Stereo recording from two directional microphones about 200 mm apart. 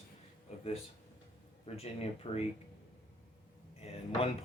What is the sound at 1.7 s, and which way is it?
Speech, 30° left (ahead or behind).